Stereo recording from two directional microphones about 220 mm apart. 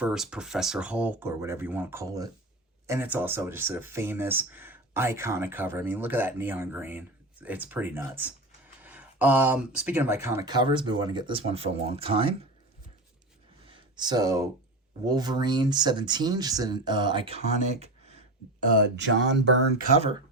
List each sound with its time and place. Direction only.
0.0 s speech: 5° right (ahead or behind); by 12.5 s 25° right (ahead or behind)
13.7 s a sound: 20° right (ahead or behind)
15.0 s speech: 20° right (ahead or behind)
18.9 s speech: 55° right (ahead or behind)